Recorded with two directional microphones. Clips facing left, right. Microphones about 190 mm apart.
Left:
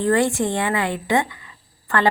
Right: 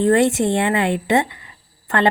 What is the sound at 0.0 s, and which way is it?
A woman's voice, 20° right (ahead or behind).